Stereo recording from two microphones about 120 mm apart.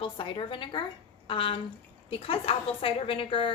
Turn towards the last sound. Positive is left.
turn(degrees=50)  # may be behind; listen again after turning